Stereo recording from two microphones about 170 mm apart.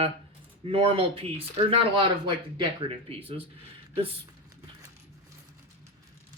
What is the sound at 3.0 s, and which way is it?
Speech, 35° right (ahead or behind).